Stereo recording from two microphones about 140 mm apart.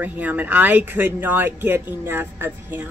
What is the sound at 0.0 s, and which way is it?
A woman's voice, 10° right (ahead or behind).